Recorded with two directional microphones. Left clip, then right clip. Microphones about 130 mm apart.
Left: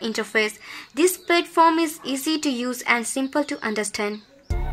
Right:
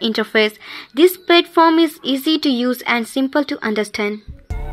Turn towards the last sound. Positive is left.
turn(degrees=-20)  # may be behind; listen again after turning